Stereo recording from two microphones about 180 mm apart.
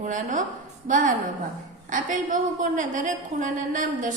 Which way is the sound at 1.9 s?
45° right (ahead or behind).